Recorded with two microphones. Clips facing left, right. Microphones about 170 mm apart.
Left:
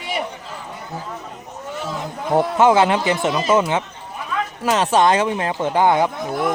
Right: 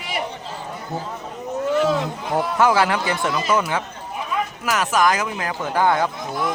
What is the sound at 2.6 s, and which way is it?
Speech, 20° left (ahead or behind).